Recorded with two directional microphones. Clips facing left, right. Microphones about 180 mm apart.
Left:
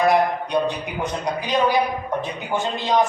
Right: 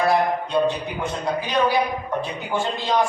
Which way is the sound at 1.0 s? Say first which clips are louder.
Even; 15° left (ahead or behind).